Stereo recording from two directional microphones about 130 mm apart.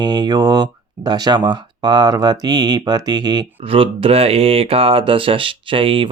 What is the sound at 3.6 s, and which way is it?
Speech, 45° right (ahead or behind).